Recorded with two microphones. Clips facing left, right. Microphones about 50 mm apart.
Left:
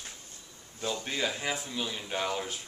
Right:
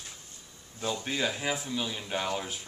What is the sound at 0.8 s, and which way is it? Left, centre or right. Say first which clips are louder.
Speech: right 1 dB; centre.